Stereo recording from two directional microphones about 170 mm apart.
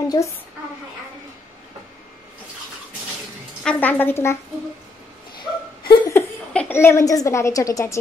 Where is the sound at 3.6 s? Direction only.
10° left (ahead or behind).